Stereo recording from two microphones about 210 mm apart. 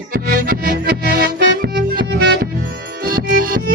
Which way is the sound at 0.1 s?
45° right (ahead or behind).